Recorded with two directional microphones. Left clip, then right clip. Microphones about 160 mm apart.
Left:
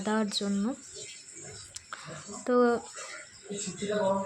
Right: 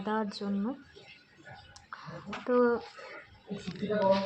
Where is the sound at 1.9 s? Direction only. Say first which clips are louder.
Right 1 dB; 20° left (ahead or behind).